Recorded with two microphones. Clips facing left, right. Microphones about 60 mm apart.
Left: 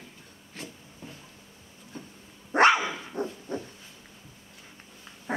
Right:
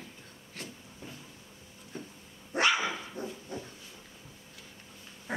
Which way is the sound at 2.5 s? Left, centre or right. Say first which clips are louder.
Left 7 dB; left.